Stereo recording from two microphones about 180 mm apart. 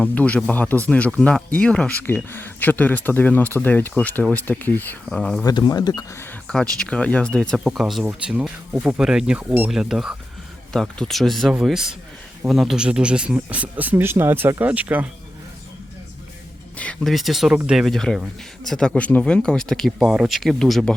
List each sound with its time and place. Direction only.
0.0 s speech: 10° left (ahead or behind)
5.5 s speech: 20° left (ahead or behind)
6.5 s speech: 5° left (ahead or behind)
16.7 s speech: 5° left (ahead or behind)